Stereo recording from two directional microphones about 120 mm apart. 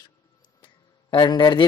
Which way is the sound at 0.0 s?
40° left (ahead or behind).